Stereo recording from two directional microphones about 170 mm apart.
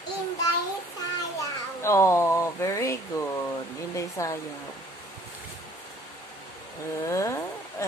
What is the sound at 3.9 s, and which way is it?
Speech, 20° left (ahead or behind).